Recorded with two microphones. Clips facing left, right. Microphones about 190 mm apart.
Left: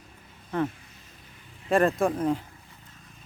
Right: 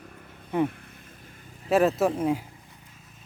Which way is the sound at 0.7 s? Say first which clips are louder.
Right 5 dB; 55° right (ahead or behind).